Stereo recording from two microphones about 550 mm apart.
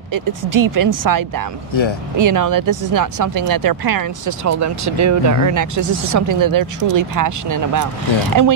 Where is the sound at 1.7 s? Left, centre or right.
Left.